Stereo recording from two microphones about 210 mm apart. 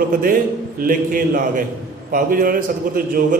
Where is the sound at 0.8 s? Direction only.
40° right (ahead or behind).